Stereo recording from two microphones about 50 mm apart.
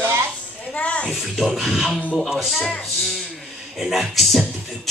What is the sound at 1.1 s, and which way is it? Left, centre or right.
Speech, centre.